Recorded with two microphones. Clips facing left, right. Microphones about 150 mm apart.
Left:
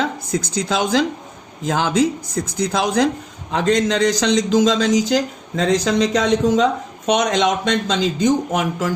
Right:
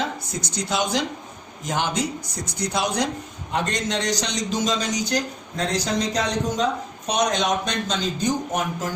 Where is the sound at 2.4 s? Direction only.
90° left.